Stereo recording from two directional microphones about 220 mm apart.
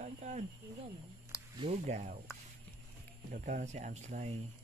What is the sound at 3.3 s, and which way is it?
Speech, 35° right (ahead or behind).